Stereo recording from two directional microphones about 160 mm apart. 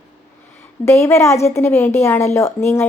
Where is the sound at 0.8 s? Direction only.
15° left (ahead or behind).